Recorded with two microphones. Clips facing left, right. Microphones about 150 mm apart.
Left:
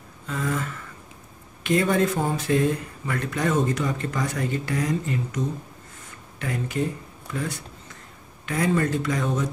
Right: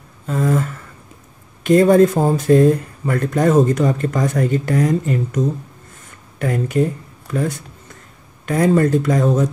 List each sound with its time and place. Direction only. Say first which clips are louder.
0.3 s a sound: right 9 dB; 40° right (ahead or behind)
1.6 s speech: right 10 dB; 40° right (ahead or behind)
6.4 s speech: right 9 dB; 45° right (ahead or behind)